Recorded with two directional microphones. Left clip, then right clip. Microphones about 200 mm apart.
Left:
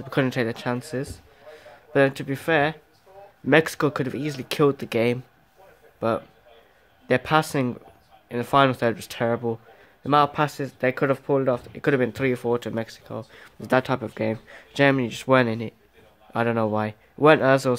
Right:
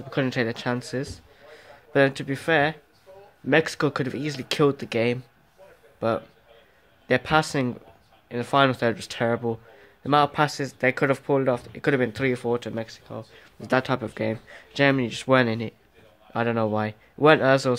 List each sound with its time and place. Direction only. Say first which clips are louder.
0.1 s a man's voice: left 1 dB; 10° left (ahead or behind)
13.7 s speech: left 1 dB; 5° left (ahead or behind)